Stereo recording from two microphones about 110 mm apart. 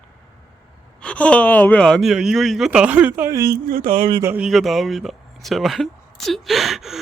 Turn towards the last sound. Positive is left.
turn(degrees=0)  # may be behind; listen again after turning